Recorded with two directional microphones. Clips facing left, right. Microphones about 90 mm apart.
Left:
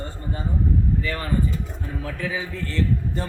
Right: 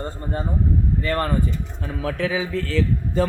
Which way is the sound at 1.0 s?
50° right (ahead or behind).